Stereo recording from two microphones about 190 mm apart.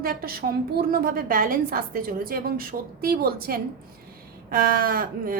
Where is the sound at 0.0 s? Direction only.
50° right (ahead or behind).